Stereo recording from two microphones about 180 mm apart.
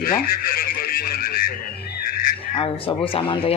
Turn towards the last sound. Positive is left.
turn(degrees=30)  # may be behind; listen again after turning